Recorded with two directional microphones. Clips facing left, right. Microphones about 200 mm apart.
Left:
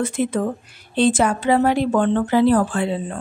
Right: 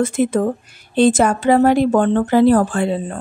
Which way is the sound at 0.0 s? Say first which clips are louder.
Right 4 dB; 45° right (ahead or behind).